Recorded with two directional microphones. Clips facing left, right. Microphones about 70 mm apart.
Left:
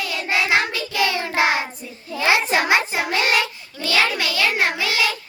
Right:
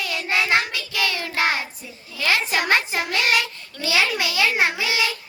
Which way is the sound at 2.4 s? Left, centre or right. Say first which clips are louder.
Left 3 dB; left.